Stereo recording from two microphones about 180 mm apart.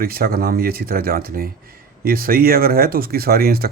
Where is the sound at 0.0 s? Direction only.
55° right (ahead or behind).